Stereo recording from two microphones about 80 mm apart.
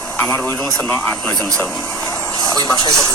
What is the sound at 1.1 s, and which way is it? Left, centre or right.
Speech, centre.